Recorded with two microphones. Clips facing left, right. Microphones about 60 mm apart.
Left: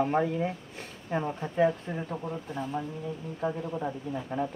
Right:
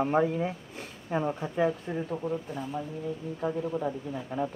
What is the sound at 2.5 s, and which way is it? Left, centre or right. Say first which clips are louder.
Speech: left 1 dB; left.